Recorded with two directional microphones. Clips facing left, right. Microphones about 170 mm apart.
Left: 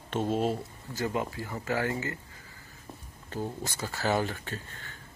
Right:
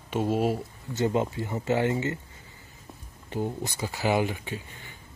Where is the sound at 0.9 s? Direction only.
25° right (ahead or behind).